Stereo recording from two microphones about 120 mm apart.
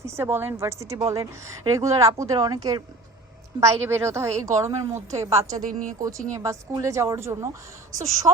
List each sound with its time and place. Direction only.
0.0 s a woman's voice: 20° right (ahead or behind)